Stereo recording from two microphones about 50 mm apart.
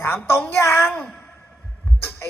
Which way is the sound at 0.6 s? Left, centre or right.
Left.